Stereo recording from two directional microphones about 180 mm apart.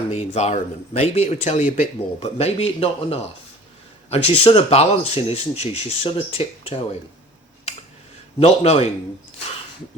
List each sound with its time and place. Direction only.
0.1 s speech: 35° left (ahead or behind)
8.4 s speech: 35° left (ahead or behind)